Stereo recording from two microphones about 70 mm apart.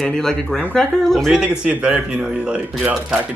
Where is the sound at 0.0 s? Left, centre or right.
Centre.